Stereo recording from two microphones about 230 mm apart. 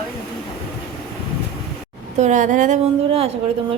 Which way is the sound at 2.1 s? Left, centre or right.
Right.